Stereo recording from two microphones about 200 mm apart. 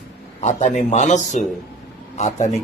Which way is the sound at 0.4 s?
35° left (ahead or behind).